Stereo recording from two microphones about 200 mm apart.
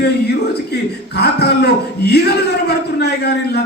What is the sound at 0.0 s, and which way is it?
A man's voice, 55° left (ahead or behind).